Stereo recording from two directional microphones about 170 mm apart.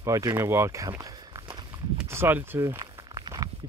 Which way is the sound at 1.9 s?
15° right (ahead or behind).